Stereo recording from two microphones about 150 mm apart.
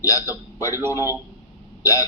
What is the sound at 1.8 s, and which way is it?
Speech, 20° left (ahead or behind).